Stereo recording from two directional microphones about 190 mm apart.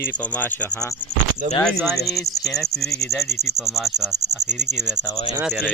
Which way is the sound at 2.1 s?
Centre (ahead or behind).